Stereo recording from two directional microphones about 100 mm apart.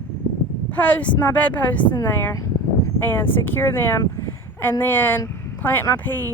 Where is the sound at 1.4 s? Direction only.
15° left (ahead or behind).